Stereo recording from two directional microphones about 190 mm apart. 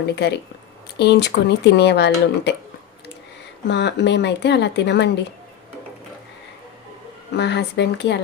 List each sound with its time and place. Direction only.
0.0 s speech: 60° left (ahead or behind)
3.7 s speech: 65° left (ahead or behind)
7.3 s speech: 65° left (ahead or behind)